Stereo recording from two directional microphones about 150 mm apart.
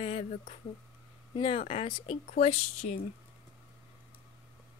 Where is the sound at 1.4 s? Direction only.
40° left (ahead or behind).